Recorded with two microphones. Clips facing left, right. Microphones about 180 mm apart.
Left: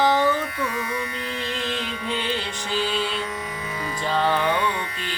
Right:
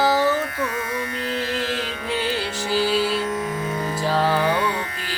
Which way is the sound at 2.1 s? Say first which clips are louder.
Right 4 dB; 5° right (ahead or behind).